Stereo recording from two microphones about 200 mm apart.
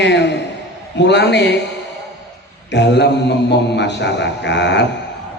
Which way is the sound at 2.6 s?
60° left (ahead or behind).